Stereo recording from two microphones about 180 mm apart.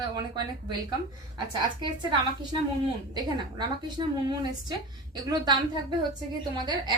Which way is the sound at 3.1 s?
25° right (ahead or behind).